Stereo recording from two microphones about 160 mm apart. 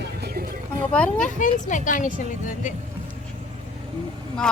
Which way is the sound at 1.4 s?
55° left (ahead or behind).